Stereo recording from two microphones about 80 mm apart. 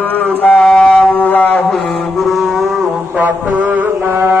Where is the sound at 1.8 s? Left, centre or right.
Centre.